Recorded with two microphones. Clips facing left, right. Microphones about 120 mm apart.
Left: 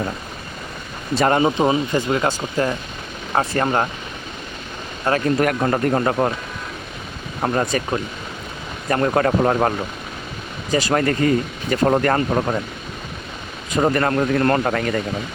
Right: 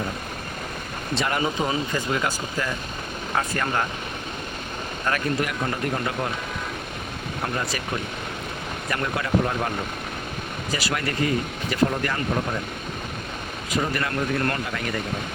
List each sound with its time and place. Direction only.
1.3 s speech: 30° left (ahead or behind)
2.2 s speech: 40° left (ahead or behind)
5.1 s speech: 35° left (ahead or behind)
5.4 s speech: 55° left (ahead or behind)
7.4 s speech: 50° left (ahead or behind)
8.9 s speech: 40° left (ahead or behind)
9.2 s speech: 55° left (ahead or behind)
10.7 s speech: 40° left (ahead or behind)
11.9 s speech: 55° left (ahead or behind)
13.7 s speech: 50° left (ahead or behind)